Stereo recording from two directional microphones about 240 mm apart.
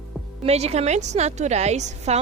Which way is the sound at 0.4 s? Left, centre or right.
Right.